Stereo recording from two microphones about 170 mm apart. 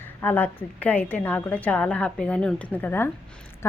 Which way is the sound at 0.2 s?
10° left (ahead or behind).